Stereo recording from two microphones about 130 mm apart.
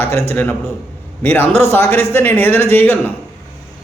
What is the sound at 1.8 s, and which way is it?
Speech, 50° right (ahead or behind).